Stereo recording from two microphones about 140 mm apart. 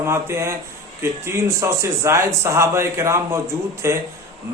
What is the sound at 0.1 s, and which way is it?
A man's voice, 20° right (ahead or behind).